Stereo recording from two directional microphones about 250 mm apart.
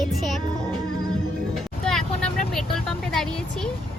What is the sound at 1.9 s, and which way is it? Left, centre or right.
Speech, centre.